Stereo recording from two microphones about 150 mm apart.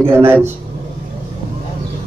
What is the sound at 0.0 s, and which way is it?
Speech, 15° right (ahead or behind).